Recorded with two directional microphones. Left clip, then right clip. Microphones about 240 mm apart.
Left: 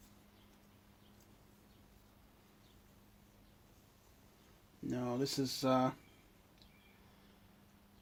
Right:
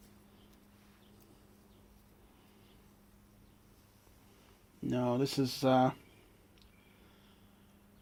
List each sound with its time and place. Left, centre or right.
4.9 s speech: right